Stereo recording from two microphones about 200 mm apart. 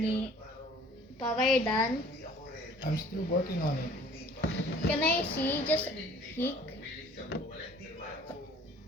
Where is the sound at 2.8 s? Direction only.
45° left (ahead or behind).